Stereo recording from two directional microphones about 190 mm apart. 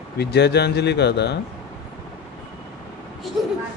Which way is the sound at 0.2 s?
60° left (ahead or behind).